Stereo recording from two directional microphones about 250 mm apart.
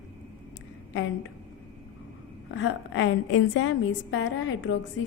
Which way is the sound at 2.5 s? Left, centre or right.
Left.